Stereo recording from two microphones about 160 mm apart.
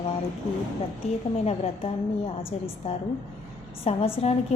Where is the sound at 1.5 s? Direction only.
40° left (ahead or behind).